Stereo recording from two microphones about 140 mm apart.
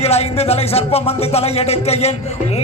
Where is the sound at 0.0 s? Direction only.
50° left (ahead or behind).